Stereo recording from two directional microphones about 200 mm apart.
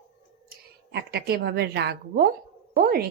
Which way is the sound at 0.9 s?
50° right (ahead or behind).